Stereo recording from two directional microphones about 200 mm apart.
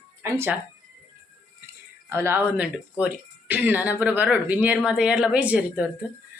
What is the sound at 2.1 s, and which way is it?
Speech, 10° right (ahead or behind).